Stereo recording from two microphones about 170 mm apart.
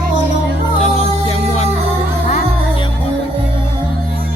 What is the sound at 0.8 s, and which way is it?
Music, 40° left (ahead or behind).